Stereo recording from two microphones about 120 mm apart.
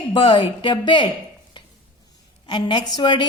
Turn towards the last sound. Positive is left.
turn(degrees=40)  # may be behind; listen again after turning